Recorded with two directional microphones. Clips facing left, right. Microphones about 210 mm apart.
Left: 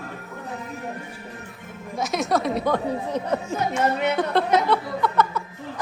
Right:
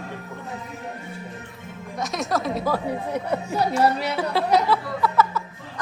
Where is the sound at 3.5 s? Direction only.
35° right (ahead or behind).